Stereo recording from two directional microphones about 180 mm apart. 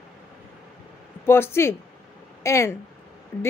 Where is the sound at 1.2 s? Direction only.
15° left (ahead or behind).